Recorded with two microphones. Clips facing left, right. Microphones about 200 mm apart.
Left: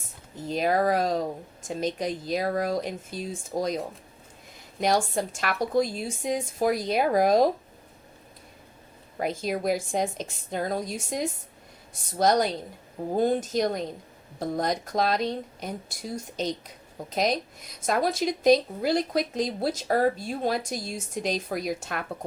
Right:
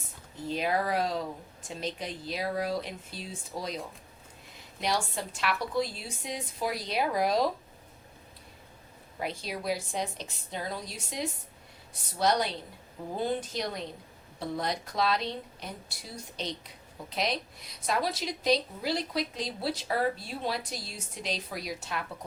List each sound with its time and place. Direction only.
0.4 s speech: 45° left (ahead or behind)
4.8 s speech: 45° left (ahead or behind)
9.1 s speech: 45° left (ahead or behind)